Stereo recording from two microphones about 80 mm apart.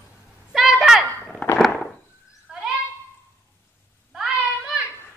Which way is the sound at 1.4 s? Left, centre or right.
Centre.